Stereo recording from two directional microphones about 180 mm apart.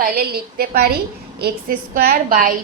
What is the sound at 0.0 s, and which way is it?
A woman's voice, 55° right (ahead or behind).